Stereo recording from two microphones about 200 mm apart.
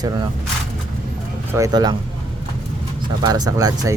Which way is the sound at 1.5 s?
15° right (ahead or behind).